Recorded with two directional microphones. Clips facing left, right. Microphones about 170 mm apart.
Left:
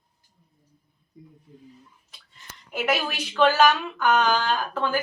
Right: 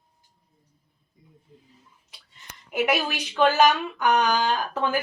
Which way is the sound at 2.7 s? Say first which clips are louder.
Right 2 dB; 10° right (ahead or behind).